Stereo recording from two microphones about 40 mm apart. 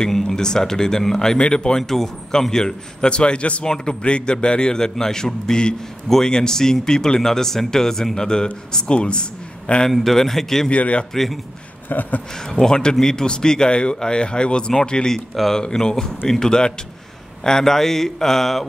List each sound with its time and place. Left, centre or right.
0.1 s a man's voice: centre
1.8 s a man's voice: centre; by 3.6 s left
3.6 s a man's voice: centre
6.0 s speech: centre; by 9.8 s left
10.1 s speech: centre
10.7 s speech: left
11.9 s speech: left
12.4 s a man's voice: centre
15.1 s a man's voice: centre